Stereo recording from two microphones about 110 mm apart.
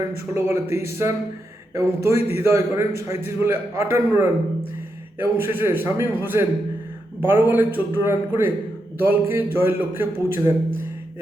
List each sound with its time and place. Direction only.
0.3 s a man's voice: 25° right (ahead or behind)